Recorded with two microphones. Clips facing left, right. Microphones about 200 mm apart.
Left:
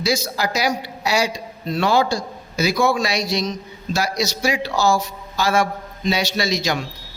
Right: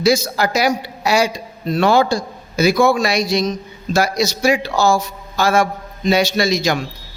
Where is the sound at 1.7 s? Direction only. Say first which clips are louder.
Right 4 dB; 55° right (ahead or behind).